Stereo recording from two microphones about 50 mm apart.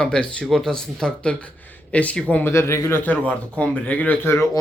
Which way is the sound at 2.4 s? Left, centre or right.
Left.